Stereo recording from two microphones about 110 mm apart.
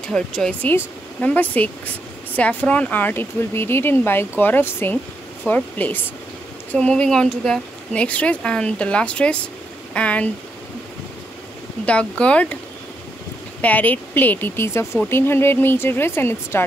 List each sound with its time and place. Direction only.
0.1 s speech: 5° left (ahead or behind)
11.8 s speech: 10° left (ahead or behind)
13.6 s speech: 15° left (ahead or behind)